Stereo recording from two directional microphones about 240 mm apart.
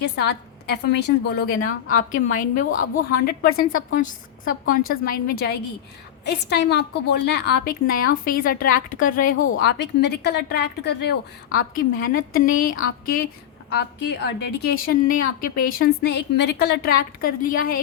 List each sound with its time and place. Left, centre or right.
0.0 s a woman's voice: left
4.9 s a woman's voice: left